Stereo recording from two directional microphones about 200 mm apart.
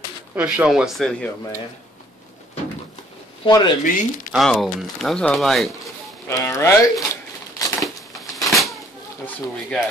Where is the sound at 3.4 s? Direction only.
20° left (ahead or behind).